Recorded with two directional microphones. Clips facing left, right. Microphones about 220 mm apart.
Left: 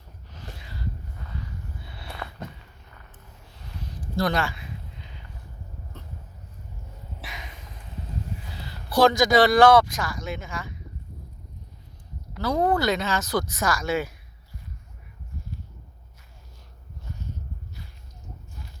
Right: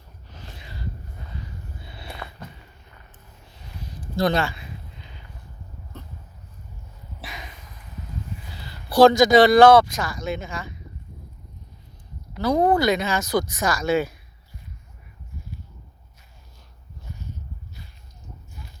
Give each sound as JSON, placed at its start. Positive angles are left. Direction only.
{"t": 4.2, "sound": "speech", "side_deg": -25}
{"t": 8.9, "sound": "speech", "side_deg": -30}
{"t": 12.3, "sound": "speech", "side_deg": -15}